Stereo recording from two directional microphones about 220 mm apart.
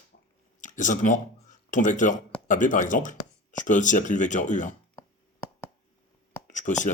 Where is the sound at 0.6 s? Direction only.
35° left (ahead or behind).